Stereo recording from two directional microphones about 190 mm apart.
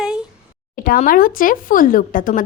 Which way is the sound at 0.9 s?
50° left (ahead or behind).